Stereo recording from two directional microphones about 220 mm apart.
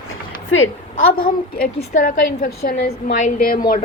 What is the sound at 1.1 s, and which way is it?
A woman's voice, 45° left (ahead or behind).